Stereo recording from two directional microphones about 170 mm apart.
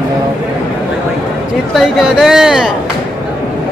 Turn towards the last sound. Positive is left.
turn(degrees=-5)  # may be behind; listen again after turning